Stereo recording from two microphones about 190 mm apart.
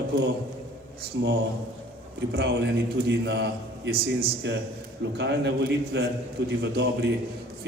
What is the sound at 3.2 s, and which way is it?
A man's voice, 60° right (ahead or behind).